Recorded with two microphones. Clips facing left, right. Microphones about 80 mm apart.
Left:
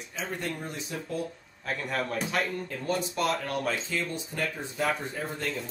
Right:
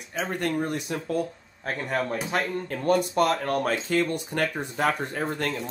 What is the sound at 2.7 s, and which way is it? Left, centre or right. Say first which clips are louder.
Speech: right 7 dB; right.